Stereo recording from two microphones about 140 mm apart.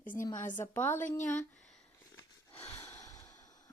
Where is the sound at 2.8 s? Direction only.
25° left (ahead or behind).